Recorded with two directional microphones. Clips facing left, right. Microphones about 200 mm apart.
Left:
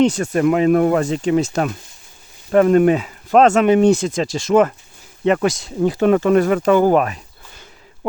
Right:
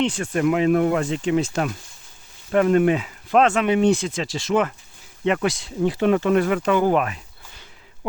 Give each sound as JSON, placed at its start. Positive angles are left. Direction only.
{"t": 0.0, "sound": "speech", "side_deg": 40}